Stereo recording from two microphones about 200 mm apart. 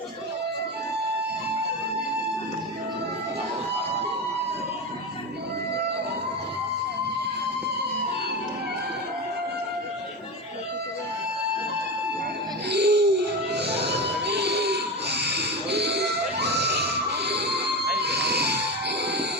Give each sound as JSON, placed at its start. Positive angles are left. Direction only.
{"t": 12.6, "sound": "music", "side_deg": -55}
{"t": 13.5, "sound": "a sound", "side_deg": -55}
{"t": 18.0, "sound": "music", "side_deg": -55}